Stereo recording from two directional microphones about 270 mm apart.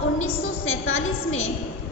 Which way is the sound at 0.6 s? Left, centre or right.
Left.